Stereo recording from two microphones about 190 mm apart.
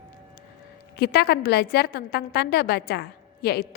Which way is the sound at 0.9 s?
55° left (ahead or behind).